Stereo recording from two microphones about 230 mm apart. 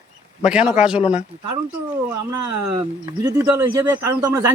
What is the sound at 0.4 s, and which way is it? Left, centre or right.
Speech, centre.